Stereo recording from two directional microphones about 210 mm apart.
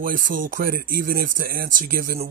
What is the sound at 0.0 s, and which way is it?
Speech, 40° right (ahead or behind).